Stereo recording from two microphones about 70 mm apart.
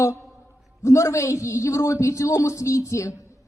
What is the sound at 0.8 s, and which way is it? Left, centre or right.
A man's voice, left.